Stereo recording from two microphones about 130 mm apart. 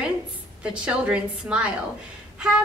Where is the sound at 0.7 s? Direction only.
10° right (ahead or behind).